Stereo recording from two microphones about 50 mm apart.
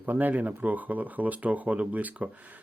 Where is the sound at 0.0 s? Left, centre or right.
Right.